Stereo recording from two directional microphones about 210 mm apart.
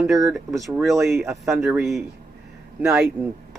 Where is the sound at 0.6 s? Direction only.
Centre (ahead or behind).